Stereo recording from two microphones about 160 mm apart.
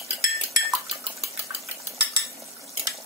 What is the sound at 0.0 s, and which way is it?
Dishes, 40° right (ahead or behind).